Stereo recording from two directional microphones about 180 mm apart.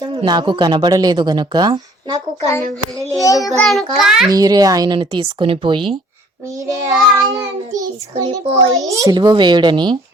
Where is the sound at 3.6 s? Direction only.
Centre (ahead or behind).